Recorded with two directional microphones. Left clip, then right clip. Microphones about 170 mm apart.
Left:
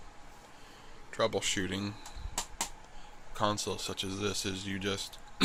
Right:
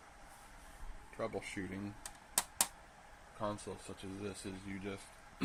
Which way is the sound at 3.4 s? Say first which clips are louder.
Left 10 dB; 30° left (ahead or behind).